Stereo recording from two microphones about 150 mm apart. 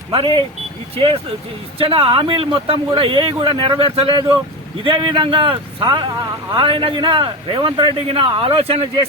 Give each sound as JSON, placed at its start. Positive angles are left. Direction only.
{"t": 0.1, "sound": "speech", "side_deg": -35}